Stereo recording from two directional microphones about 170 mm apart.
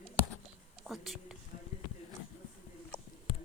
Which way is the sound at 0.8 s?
Centre (ahead or behind).